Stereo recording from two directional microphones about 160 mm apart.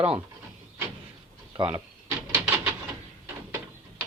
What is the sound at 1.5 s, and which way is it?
Speech, 30° right (ahead or behind).